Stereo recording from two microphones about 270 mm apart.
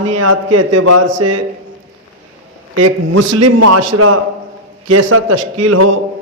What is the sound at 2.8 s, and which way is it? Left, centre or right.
A man's voice, right.